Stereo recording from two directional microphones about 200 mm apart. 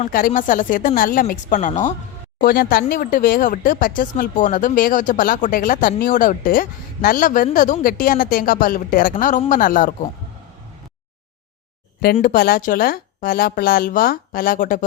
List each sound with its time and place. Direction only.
0.0 s a woman's voice: 45° left (ahead or behind)
12.1 s speech: 45° left (ahead or behind)